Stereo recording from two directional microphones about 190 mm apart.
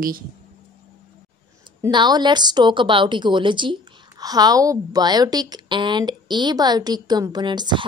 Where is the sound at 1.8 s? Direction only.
25° right (ahead or behind).